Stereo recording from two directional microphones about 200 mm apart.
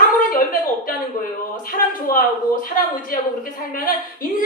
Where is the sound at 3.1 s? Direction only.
45° left (ahead or behind).